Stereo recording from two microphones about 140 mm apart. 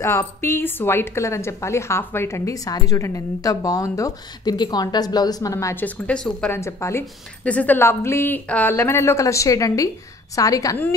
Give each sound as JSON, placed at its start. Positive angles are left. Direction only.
{"t": 0.0, "sound": "a woman's voice", "side_deg": 20}
{"t": 6.5, "sound": "a woman's voice", "side_deg": 20}